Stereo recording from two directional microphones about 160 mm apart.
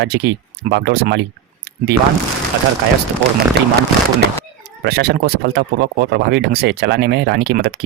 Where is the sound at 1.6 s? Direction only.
90° right.